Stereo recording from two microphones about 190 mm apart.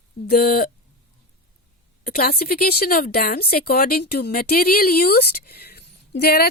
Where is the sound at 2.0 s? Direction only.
50° left (ahead or behind).